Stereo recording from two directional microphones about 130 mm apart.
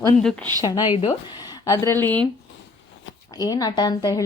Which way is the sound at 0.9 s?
40° left (ahead or behind).